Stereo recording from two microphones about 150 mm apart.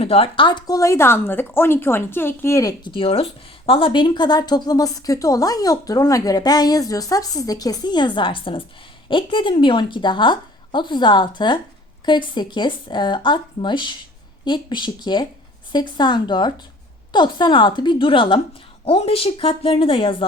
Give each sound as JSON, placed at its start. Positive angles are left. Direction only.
{"t": 0.0, "sound": "a woman's voice", "side_deg": 40}